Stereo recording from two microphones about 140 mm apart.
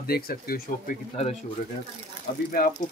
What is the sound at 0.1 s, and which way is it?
Speech, 90° left.